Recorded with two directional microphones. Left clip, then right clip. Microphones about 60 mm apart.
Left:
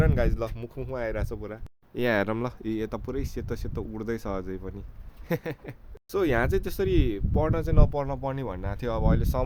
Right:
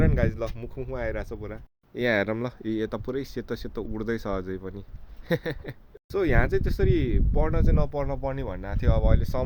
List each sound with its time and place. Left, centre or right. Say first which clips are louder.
0.0 s speech: even; left
0.5 s speech: right 1 dB; left
0.9 s speech: left 1 dB; left
2.6 s speech: right 4 dB; centre
3.1 s speech: right 2 dB; right
6.1 s speech: even; left